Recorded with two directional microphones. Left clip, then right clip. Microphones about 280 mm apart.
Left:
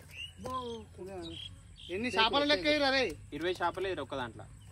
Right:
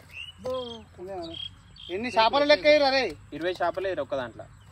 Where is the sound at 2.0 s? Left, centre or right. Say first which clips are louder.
Right 7 dB; right.